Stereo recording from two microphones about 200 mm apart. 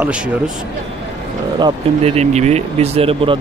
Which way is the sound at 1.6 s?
30° right (ahead or behind).